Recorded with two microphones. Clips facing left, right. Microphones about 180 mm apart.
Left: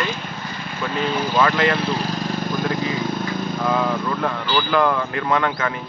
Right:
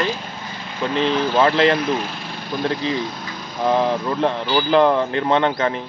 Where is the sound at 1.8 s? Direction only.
35° left (ahead or behind).